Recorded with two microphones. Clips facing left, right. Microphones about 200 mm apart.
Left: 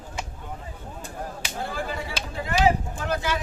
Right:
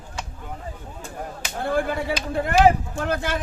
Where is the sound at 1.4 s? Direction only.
55° right (ahead or behind).